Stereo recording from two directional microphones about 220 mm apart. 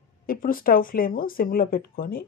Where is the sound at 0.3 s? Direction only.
40° left (ahead or behind).